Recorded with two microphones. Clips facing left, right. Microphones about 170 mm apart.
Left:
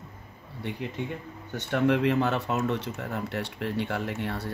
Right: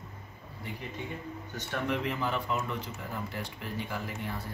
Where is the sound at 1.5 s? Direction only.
70° left (ahead or behind).